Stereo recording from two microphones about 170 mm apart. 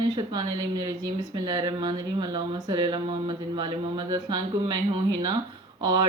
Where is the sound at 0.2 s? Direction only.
25° right (ahead or behind).